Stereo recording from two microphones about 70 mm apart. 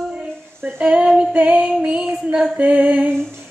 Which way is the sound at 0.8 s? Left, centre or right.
Centre.